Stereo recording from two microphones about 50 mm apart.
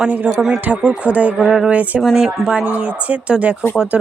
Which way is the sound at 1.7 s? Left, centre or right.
Right.